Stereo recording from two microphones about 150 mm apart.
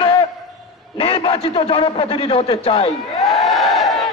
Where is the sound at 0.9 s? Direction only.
40° left (ahead or behind).